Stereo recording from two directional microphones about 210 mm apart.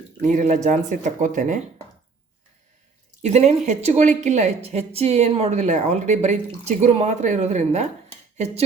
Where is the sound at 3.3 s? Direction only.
35° right (ahead or behind).